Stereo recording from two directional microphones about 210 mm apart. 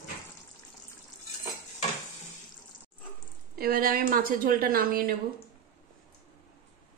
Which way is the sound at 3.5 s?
45° right (ahead or behind).